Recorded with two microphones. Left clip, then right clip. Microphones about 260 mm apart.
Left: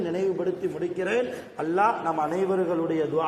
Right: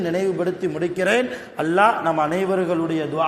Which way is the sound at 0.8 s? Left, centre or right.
Right.